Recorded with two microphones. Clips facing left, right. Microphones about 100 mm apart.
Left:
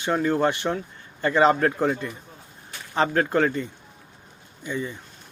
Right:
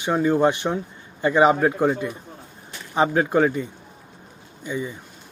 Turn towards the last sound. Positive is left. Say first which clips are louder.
# right 1 dB
turn(degrees=-10)  # may be behind; listen again after turning